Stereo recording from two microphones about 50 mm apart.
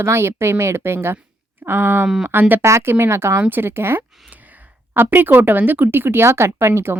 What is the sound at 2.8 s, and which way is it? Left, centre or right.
Speech, right.